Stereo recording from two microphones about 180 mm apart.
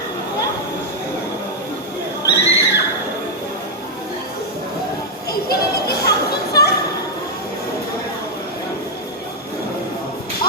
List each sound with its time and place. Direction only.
2.2 s neigh: 70° left (ahead or behind)
5.3 s children playing: 60° left (ahead or behind)